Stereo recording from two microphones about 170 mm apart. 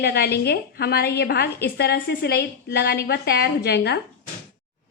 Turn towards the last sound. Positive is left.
turn(degrees=80)